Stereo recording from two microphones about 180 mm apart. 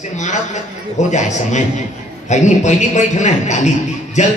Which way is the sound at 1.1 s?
40° left (ahead or behind).